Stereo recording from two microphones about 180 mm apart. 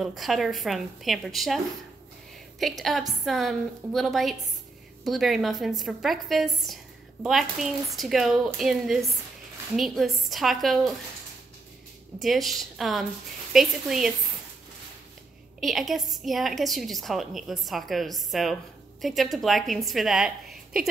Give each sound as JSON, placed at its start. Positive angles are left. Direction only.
{"t": 0.0, "sound": "a woman's voice", "side_deg": 0}
{"t": 2.8, "sound": "a woman's voice", "side_deg": 0}
{"t": 7.9, "sound": "a woman's voice", "side_deg": 0}
{"t": 12.2, "sound": "a woman's voice", "side_deg": 0}
{"t": 15.6, "sound": "a woman's voice", "side_deg": 0}